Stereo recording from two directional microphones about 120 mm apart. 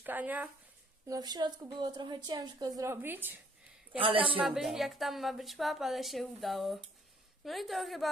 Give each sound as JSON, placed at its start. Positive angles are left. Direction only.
{"t": 0.0, "sound": "a woman's voice", "side_deg": -15}
{"t": 1.0, "sound": "a woman's voice", "side_deg": -30}
{"t": 4.0, "sound": "a woman's voice", "side_deg": -45}
{"t": 4.4, "sound": "a woman's voice", "side_deg": -5}